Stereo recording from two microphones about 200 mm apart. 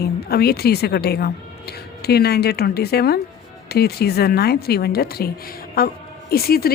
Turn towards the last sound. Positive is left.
turn(degrees=50)  # may be behind; listen again after turning